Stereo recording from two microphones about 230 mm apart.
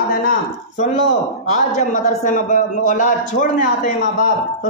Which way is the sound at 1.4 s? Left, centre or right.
Left.